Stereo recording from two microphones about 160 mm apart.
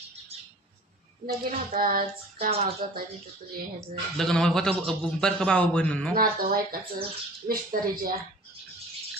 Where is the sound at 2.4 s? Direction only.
40° right (ahead or behind).